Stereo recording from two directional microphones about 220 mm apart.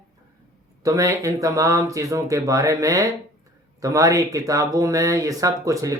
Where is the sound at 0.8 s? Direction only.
15° right (ahead or behind).